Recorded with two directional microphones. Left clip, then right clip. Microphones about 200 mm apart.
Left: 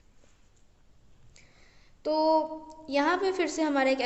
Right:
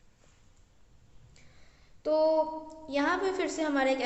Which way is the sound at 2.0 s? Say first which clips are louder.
Left 1 dB; 40° left (ahead or behind).